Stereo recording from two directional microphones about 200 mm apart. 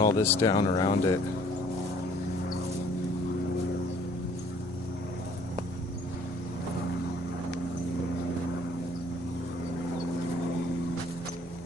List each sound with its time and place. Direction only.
0.0 s speech: 10° left (ahead or behind)